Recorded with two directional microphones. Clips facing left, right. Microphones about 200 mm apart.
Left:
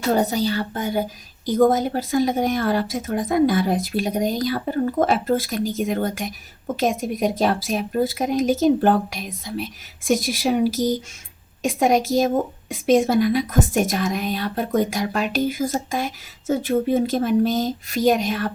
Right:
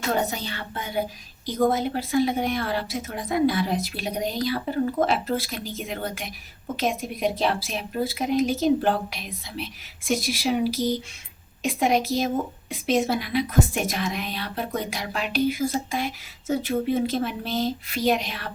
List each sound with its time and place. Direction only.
0.1 s a woman's voice: 35° left (ahead or behind)